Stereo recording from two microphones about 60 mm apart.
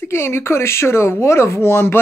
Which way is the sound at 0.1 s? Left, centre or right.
Left.